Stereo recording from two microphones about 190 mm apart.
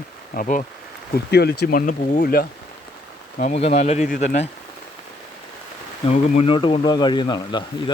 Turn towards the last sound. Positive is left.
turn(degrees=25)  # may be behind; listen again after turning